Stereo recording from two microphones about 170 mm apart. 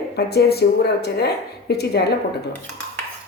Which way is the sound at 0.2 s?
70° left (ahead or behind).